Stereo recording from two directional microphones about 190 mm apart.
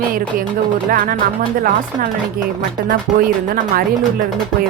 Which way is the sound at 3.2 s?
50° right (ahead or behind).